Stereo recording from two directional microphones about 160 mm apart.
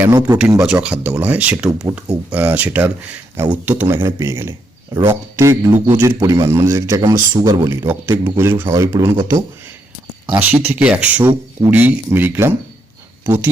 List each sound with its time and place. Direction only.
0.0 s a man's voice: 20° right (ahead or behind)
0.6 s a man's voice: 5° right (ahead or behind)
10.6 s speech: 10° right (ahead or behind)